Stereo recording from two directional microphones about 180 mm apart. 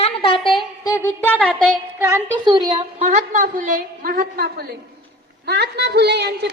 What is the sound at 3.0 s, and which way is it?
A woman's voice, 40° right (ahead or behind).